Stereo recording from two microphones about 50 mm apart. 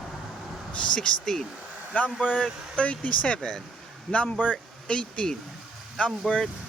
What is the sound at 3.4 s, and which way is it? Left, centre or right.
Speech, centre.